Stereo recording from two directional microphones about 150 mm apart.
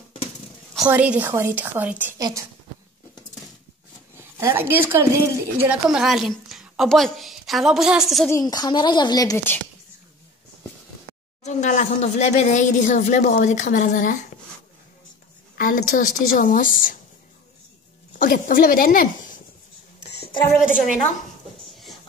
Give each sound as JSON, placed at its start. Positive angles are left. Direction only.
{"t": 0.7, "sound": "a woman's voice", "side_deg": -10}
{"t": 2.1, "sound": "a woman's voice", "side_deg": -25}
{"t": 4.4, "sound": "a woman's voice", "side_deg": -15}
{"t": 5.9, "sound": "a woman's voice", "side_deg": -5}
{"t": 8.3, "sound": "speech", "side_deg": 25}
{"t": 11.4, "sound": "speech", "side_deg": 50}
{"t": 15.5, "sound": "speech", "side_deg": 65}
{"t": 18.2, "sound": "speech", "side_deg": 65}